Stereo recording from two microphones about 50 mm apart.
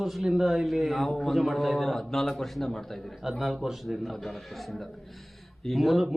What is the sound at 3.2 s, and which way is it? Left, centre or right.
Speech, centre.